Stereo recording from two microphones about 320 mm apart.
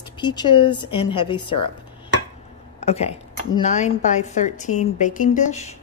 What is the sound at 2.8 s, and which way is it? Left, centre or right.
A woman's voice, centre.